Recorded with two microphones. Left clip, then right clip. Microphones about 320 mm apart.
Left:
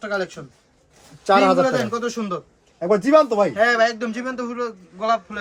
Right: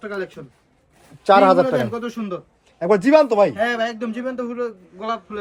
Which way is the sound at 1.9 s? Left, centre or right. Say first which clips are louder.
Left 3 dB; centre.